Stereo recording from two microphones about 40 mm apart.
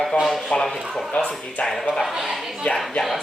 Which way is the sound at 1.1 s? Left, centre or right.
Left.